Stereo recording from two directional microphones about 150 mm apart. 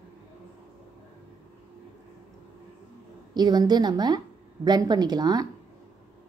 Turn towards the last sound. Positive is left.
turn(degrees=-25)  # may be behind; listen again after turning